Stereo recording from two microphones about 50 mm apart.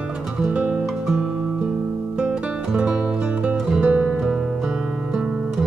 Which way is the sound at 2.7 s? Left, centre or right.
Centre.